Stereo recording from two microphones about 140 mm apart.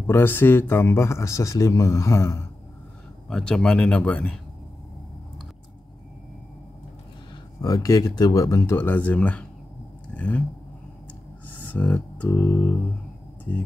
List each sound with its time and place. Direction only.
0.0 s speech: 15° left (ahead or behind)
3.3 s speech: 5° left (ahead or behind)
7.6 s speech: 25° left (ahead or behind)
10.1 s a sound: 10° left (ahead or behind)
11.4 s music: 10° left (ahead or behind)
13.5 s speech: 15° left (ahead or behind)